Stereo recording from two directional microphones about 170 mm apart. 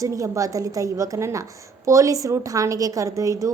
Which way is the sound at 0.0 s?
20° right (ahead or behind).